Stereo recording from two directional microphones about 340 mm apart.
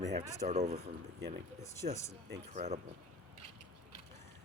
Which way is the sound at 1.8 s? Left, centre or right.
Right.